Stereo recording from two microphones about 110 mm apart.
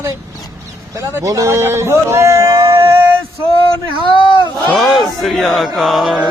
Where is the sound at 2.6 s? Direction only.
50° right (ahead or behind).